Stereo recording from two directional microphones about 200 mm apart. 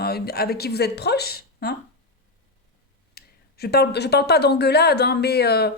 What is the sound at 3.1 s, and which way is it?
A woman's voice, 50° left (ahead or behind).